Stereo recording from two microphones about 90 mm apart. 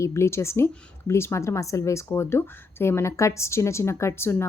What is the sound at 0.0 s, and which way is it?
A woman's voice, 30° left (ahead or behind).